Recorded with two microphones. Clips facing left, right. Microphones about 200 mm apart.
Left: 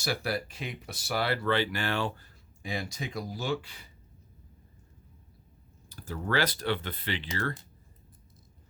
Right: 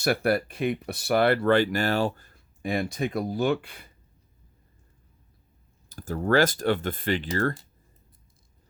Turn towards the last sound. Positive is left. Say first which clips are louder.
# right 8 dB
turn(degrees=-45)  # may be behind; listen again after turning